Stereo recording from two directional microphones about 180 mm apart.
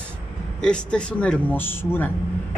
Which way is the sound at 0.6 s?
5° left (ahead or behind).